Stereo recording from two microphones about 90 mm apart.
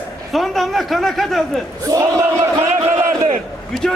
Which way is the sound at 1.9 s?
35° right (ahead or behind).